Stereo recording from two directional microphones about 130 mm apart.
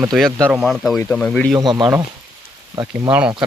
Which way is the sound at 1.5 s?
30° right (ahead or behind).